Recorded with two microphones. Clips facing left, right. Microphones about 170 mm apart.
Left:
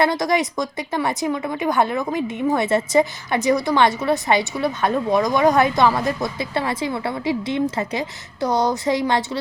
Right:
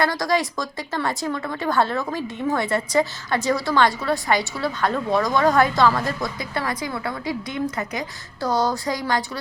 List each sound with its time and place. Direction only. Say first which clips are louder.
0.0 s speech: left 3 dB; 20° left (ahead or behind)